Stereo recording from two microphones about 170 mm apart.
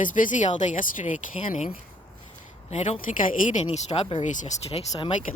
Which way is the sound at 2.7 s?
40° left (ahead or behind).